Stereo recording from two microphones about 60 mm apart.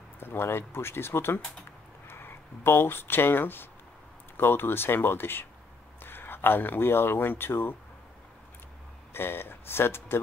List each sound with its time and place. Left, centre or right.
0.2 s speech: left
9.1 s speech: left